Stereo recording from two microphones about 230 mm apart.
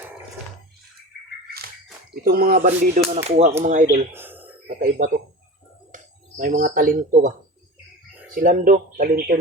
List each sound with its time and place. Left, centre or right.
2.2 s speech: right
4.1 s a sound: centre
4.8 s speech: right
8.4 s speech: right